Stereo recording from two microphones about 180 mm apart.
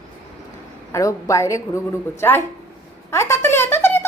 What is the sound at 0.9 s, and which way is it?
Speech, 15° left (ahead or behind).